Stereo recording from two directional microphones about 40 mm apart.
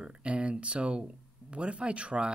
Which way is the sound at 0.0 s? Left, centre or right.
Right.